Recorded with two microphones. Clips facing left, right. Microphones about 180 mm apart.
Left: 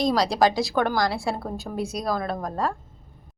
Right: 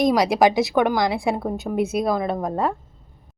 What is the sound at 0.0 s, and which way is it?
A woman's voice, 20° right (ahead or behind).